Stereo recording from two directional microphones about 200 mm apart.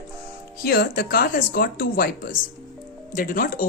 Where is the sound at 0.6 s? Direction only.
50° left (ahead or behind).